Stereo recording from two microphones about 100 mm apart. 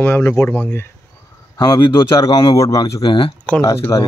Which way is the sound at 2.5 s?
30° left (ahead or behind).